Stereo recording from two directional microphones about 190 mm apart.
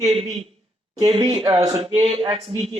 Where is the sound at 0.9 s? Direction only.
20° right (ahead or behind).